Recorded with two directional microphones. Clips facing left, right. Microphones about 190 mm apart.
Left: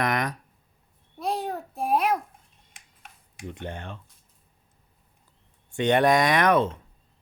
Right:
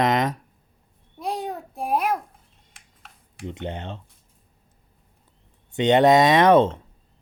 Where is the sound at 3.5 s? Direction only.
20° right (ahead or behind).